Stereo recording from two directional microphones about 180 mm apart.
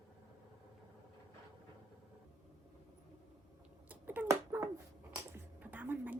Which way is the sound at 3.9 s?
10° right (ahead or behind).